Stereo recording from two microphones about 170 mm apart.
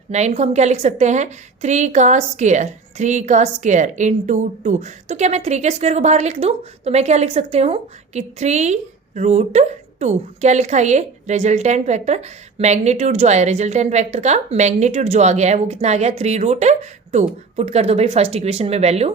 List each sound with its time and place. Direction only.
0.1 s a woman's voice: 40° right (ahead or behind)